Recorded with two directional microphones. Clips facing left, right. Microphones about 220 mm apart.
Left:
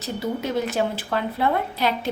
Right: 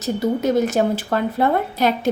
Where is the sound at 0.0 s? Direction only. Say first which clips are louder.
Right 7 dB; 45° right (ahead or behind).